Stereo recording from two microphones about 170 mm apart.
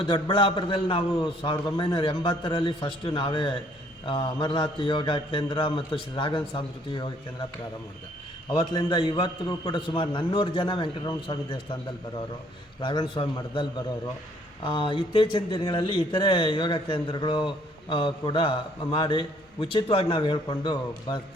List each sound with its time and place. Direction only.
0.0 s speech: 30° left (ahead or behind)
8.4 s speech: 30° left (ahead or behind)
12.8 s speech: 25° left (ahead or behind)